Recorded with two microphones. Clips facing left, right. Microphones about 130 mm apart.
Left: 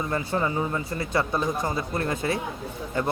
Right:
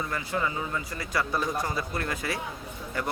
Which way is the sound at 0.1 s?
30° left (ahead or behind).